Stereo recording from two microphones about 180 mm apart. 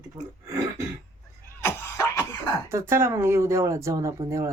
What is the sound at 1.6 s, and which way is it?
Cough, 15° left (ahead or behind).